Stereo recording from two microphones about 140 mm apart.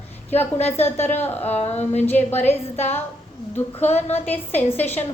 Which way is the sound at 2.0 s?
15° left (ahead or behind).